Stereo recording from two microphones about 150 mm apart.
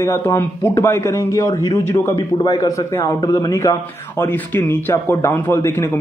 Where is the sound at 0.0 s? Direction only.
15° left (ahead or behind).